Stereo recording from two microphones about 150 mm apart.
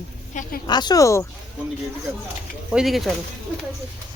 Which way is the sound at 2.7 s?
5° right (ahead or behind).